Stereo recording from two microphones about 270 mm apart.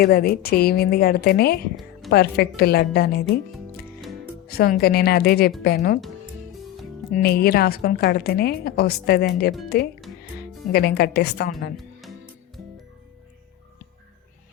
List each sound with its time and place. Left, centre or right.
0.0 s a woman's voice: left
4.4 s a woman's voice: left
7.1 s a woman's voice: left
10.7 s a woman's voice: left
11.8 s music: centre